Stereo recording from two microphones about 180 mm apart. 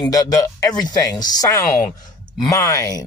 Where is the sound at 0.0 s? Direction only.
20° left (ahead or behind).